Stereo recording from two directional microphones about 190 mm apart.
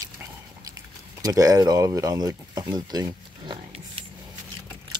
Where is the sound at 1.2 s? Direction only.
20° right (ahead or behind).